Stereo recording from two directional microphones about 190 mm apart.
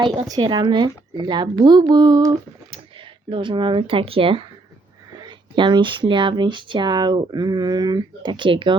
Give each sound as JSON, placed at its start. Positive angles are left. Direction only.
{"t": 0.0, "sound": "speech", "side_deg": -25}